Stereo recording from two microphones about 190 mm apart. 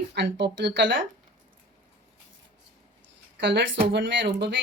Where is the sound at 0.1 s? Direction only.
65° right (ahead or behind).